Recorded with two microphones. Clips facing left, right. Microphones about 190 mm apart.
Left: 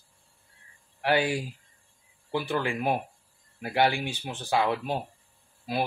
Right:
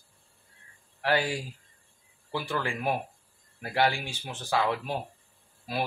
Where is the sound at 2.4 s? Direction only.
20° left (ahead or behind).